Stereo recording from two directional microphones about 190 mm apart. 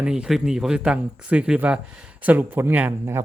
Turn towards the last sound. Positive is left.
turn(degrees=-10)  # may be behind; listen again after turning